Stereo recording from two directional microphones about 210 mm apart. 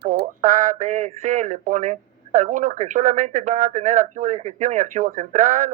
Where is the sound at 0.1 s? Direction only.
40° right (ahead or behind).